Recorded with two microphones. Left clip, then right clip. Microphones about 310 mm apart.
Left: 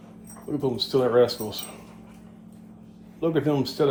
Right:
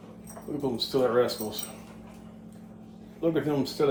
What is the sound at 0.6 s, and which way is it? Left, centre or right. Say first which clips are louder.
Speech: left 3 dB; left.